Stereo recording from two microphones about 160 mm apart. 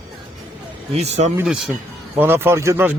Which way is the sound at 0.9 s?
45° right (ahead or behind).